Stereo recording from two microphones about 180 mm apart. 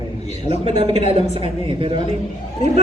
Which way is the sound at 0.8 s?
35° right (ahead or behind).